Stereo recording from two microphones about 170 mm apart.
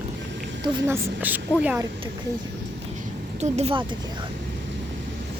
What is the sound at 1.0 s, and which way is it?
Speech, 10° right (ahead or behind).